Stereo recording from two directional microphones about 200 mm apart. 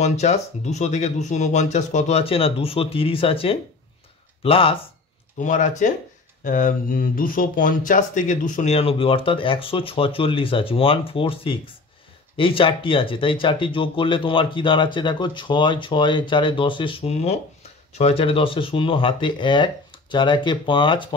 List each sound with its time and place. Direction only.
0.0 s speech: 35° left (ahead or behind)
5.4 s speech: 40° left (ahead or behind)